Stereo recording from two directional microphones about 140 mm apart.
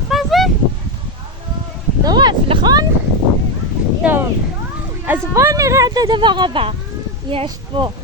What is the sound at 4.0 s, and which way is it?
Speech, 15° right (ahead or behind).